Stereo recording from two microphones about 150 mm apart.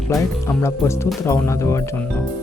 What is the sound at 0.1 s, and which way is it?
Speech, 20° left (ahead or behind).